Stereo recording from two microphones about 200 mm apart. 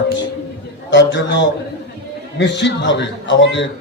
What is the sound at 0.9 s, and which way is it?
A man's voice, 65° left (ahead or behind).